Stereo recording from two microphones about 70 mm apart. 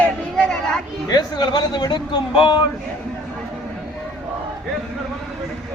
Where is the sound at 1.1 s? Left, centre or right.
Left.